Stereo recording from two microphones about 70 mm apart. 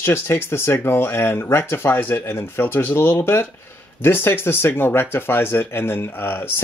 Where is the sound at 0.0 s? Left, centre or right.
Left.